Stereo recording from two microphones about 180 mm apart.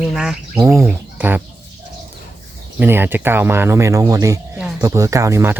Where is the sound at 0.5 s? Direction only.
15° right (ahead or behind).